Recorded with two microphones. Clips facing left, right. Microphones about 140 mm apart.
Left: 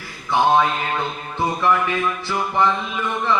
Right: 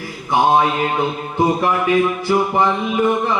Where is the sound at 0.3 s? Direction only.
15° right (ahead or behind).